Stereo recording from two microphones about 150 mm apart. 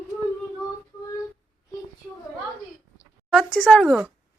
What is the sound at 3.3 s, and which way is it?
Speech, 5° left (ahead or behind).